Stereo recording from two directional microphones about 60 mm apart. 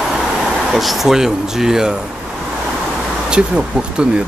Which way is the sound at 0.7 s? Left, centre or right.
Centre.